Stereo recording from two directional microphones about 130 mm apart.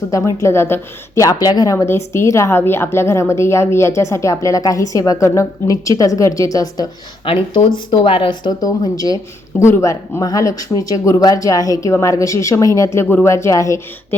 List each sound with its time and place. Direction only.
0.1 s a woman's voice: 25° left (ahead or behind)
7.3 s a woman's voice: 40° left (ahead or behind); by 14.2 s 20° left (ahead or behind)